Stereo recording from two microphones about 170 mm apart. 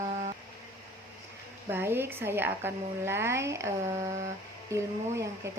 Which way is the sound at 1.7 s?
15° right (ahead or behind).